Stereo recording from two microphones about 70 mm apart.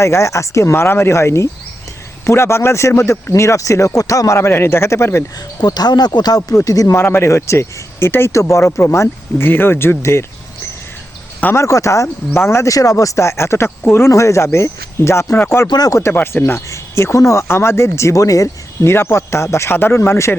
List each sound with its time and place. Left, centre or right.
0.0 s speech: left
5.5 s speech: left
6.7 s speech: left
6.9 s speech: left
11.5 s speech: left
14.1 s speech: left
15.7 s speech: left
16.1 s speech: left
18.9 s speech: left